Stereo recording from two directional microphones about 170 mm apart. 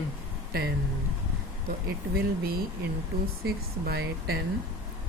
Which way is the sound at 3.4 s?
65° right (ahead or behind).